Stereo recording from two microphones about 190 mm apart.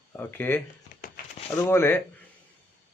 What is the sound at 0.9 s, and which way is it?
Crumpling, 50° left (ahead or behind).